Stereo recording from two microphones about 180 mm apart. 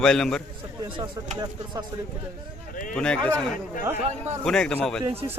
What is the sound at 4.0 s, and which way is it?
Speech, 40° right (ahead or behind).